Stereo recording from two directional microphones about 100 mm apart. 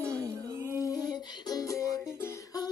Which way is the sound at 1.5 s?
35° left (ahead or behind).